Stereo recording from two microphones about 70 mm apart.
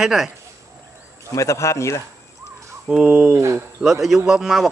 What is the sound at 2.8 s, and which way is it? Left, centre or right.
Speech, centre.